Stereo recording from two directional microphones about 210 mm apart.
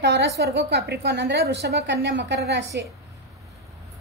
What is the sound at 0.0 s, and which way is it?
A woman's voice, 55° right (ahead or behind).